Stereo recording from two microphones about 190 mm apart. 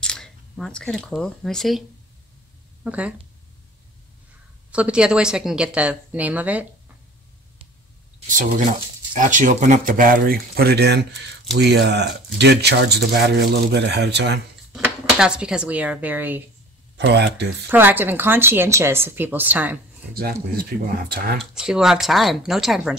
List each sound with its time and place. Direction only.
0.0 s a woman's voice: 5° left (ahead or behind)
4.6 s a woman's voice: 5° right (ahead or behind)
8.3 s speech: 45° right (ahead or behind); by 14.4 s 65° right (ahead or behind)
14.7 s speech: 5° right (ahead or behind)
16.9 s speech: 60° right (ahead or behind)
17.6 s a woman's voice: 10° right (ahead or behind)
20.5 s speech: 50° right (ahead or behind)
21.4 s a woman's voice: 5° right (ahead or behind)